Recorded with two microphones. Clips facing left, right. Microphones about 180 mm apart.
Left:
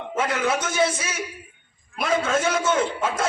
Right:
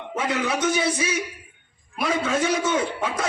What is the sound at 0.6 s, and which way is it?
Speech, 65° right (ahead or behind).